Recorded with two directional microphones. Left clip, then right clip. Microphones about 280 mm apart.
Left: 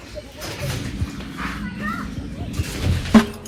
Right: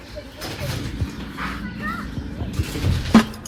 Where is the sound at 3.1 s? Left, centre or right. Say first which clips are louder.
Left 1 dB; centre.